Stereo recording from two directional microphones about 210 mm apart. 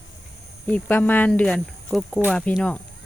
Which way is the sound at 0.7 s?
5° left (ahead or behind).